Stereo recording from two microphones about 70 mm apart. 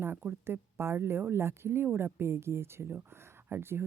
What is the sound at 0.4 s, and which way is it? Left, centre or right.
Speech, right.